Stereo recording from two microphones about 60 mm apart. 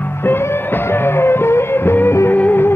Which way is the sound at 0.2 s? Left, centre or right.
Left.